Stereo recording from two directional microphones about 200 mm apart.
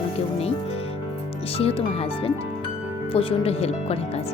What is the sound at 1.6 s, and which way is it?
Speech, 30° left (ahead or behind).